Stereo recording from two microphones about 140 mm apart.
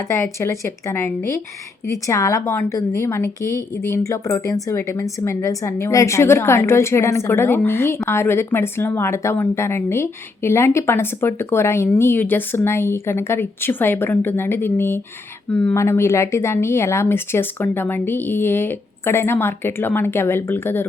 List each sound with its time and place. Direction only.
0.1 s a woman's voice: 20° left (ahead or behind)